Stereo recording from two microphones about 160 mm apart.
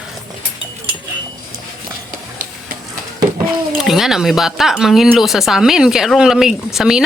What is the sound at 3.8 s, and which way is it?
Speech, centre (ahead or behind).